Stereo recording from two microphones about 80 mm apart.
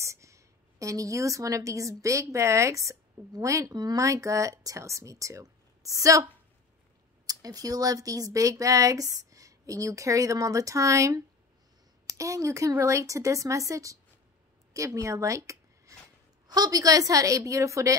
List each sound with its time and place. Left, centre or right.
0.0 s a woman's voice: right
7.2 s a woman's voice: right
16.4 s speech: right